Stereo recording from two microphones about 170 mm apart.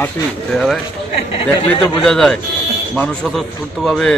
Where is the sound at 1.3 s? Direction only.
35° left (ahead or behind).